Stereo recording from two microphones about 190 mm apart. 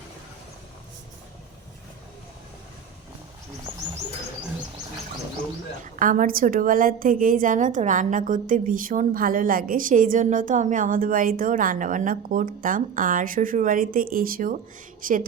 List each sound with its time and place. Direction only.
5.8 s a woman's voice: 45° right (ahead or behind)